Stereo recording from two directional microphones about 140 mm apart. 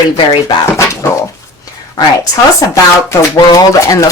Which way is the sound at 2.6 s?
25° left (ahead or behind).